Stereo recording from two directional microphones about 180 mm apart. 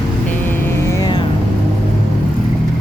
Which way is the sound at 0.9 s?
20° left (ahead or behind).